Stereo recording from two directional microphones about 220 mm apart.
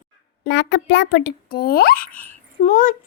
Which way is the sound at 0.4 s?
50° left (ahead or behind).